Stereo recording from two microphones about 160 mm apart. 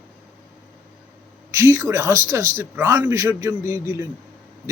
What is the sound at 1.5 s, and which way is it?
A man's voice, 20° right (ahead or behind).